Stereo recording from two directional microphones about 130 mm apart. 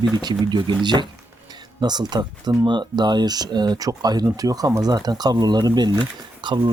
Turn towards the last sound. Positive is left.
turn(degrees=-35)  # may be behind; listen again after turning